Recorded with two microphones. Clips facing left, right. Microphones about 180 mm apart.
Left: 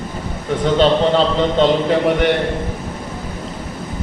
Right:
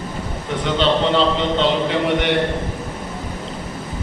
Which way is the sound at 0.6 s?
40° left (ahead or behind).